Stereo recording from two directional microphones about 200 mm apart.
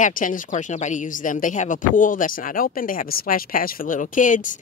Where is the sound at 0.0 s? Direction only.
40° left (ahead or behind).